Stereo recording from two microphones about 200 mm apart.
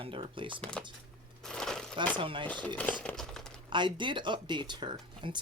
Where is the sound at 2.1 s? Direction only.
25° right (ahead or behind).